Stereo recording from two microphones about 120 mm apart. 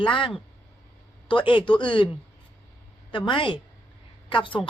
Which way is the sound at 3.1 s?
40° left (ahead or behind).